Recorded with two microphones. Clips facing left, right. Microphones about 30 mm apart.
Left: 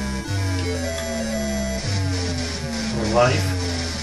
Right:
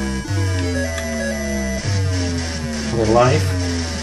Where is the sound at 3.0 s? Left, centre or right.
Right.